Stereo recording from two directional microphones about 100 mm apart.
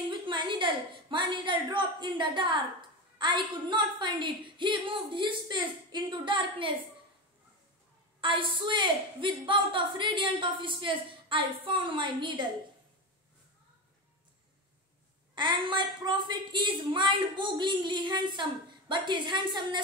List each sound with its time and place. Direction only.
0.1 s a woman's voice: 50° right (ahead or behind)
8.2 s a woman's voice: 55° right (ahead or behind)
15.3 s a woman's voice: 55° right (ahead or behind)